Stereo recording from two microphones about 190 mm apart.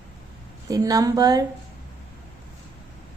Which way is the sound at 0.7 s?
20° right (ahead or behind).